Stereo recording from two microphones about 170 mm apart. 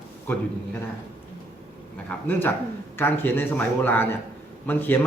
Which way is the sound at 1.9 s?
10° left (ahead or behind).